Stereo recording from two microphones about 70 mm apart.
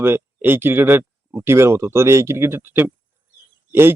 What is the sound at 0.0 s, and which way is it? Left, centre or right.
Speech, right.